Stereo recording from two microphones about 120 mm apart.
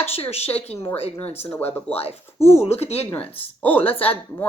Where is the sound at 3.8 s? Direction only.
55° left (ahead or behind).